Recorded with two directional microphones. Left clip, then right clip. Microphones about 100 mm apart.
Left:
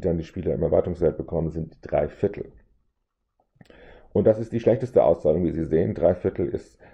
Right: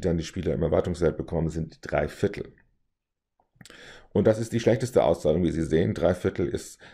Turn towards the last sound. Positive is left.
turn(degrees=-20)  # may be behind; listen again after turning